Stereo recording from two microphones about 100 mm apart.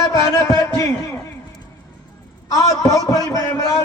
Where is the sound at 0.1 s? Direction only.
35° left (ahead or behind).